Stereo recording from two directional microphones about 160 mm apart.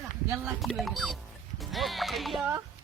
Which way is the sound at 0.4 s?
Centre (ahead or behind).